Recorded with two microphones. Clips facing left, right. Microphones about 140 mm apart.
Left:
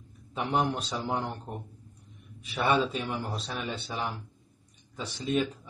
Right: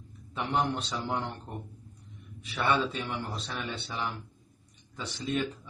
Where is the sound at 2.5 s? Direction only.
15° left (ahead or behind).